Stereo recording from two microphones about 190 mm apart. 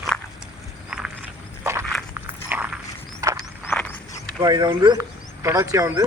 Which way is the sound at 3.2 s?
15° right (ahead or behind).